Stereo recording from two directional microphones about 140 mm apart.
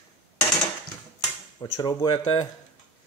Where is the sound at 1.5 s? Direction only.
30° left (ahead or behind).